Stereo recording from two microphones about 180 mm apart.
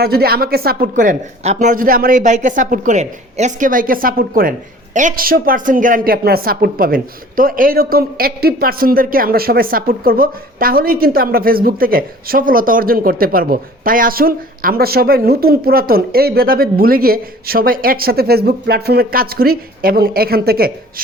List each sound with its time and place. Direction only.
0.0 s speech: 60° right (ahead or behind)